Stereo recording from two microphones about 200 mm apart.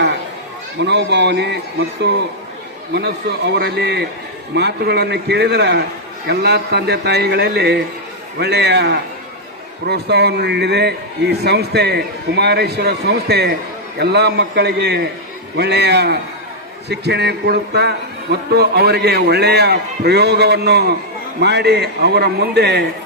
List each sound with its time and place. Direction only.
0.8 s a man's voice: 60° right (ahead or behind)
2.9 s a man's voice: 60° right (ahead or behind)